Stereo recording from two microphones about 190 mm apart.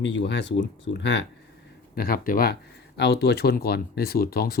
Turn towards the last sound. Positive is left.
turn(degrees=50)  # may be behind; listen again after turning